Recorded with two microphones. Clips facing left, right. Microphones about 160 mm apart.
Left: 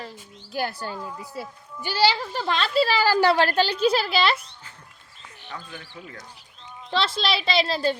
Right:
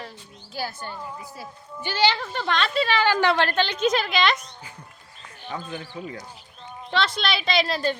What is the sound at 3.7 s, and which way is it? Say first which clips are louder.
Speech: left 1 dB; 35° left (ahead or behind).